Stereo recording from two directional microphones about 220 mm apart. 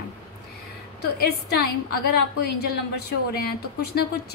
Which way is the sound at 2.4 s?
45° left (ahead or behind).